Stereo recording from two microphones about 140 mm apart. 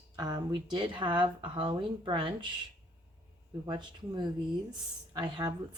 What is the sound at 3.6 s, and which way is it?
A woman's voice, 30° right (ahead or behind).